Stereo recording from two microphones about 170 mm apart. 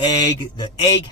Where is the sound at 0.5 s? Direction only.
25° left (ahead or behind).